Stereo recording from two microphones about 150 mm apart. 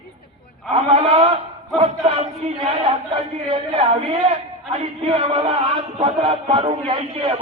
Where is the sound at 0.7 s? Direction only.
40° right (ahead or behind).